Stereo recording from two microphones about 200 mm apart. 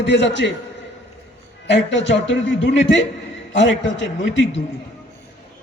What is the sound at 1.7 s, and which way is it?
Speech, 65° left (ahead or behind).